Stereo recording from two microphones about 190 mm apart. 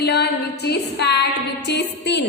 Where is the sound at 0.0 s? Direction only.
60° left (ahead or behind).